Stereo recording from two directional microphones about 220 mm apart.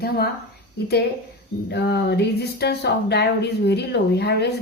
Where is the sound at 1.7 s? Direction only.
50° left (ahead or behind).